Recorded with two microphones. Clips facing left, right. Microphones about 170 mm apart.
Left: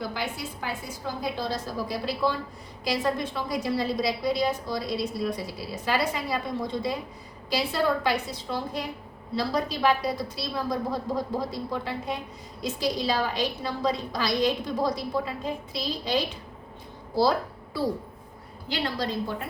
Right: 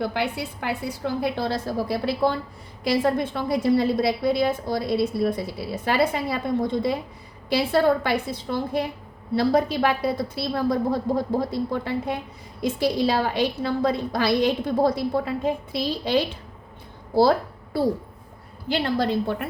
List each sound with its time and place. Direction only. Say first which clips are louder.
0.0 s a woman's voice: right 6 dB; 65° right (ahead or behind)
18.7 s a woman's voice: right 6 dB; 60° right (ahead or behind)